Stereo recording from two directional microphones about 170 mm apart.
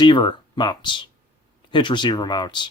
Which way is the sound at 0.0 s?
25° left (ahead or behind).